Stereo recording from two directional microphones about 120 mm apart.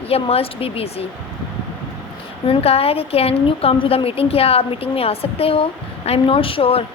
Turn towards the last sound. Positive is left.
turn(degrees=50)  # may be behind; listen again after turning